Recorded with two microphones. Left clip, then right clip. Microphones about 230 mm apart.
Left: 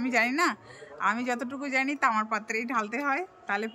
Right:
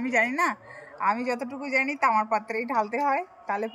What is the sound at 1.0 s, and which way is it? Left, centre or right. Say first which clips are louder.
A woman's voice: right 2 dB; left.